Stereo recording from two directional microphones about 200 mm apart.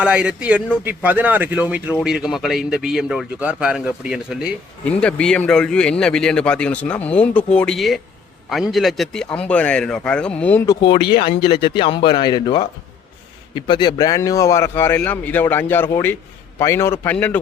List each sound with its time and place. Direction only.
0.0 s a man's voice: 5° right (ahead or behind)
11.2 s speech: 25° left (ahead or behind); by 17.3 s 10° left (ahead or behind)